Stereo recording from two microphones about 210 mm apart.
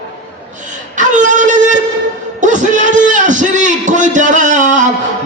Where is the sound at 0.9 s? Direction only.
35° right (ahead or behind).